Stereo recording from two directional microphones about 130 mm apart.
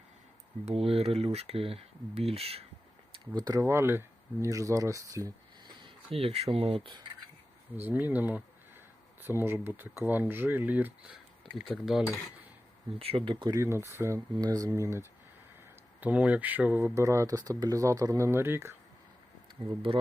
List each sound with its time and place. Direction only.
0.6 s speech: 50° right (ahead or behind)
3.1 s speech: 30° right (ahead or behind)
5.8 s speech: 45° right (ahead or behind)
7.8 s speech: 15° right (ahead or behind)
11.5 s speech: centre (ahead or behind)
13.0 s speech: 45° right (ahead or behind); by 15.0 s 25° right (ahead or behind)
16.0 s speech: 10° right (ahead or behind)
19.9 s speech: 45° right (ahead or behind)